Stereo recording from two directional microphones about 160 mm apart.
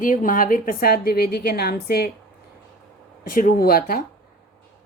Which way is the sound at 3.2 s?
60° left (ahead or behind).